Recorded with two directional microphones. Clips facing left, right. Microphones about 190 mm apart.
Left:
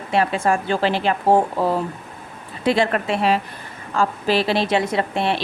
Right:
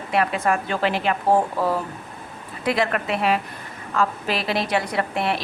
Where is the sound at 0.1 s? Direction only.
30° left (ahead or behind).